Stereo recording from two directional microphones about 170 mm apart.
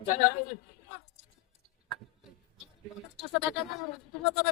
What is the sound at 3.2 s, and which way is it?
Speech, centre (ahead or behind).